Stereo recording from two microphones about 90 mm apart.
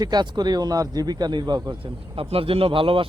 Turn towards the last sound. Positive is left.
turn(degrees=-85)